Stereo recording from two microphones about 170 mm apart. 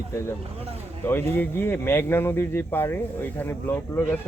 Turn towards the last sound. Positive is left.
turn(degrees=15)  # may be behind; listen again after turning